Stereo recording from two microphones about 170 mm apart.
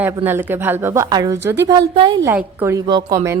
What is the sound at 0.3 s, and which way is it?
A woman's voice, 15° right (ahead or behind).